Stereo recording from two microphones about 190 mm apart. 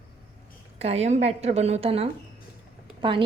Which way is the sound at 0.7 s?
35° right (ahead or behind).